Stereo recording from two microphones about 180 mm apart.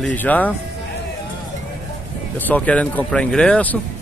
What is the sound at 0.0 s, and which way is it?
Speech, 10° left (ahead or behind).